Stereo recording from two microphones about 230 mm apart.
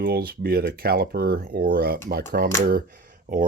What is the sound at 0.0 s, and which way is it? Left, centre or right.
Speech, right.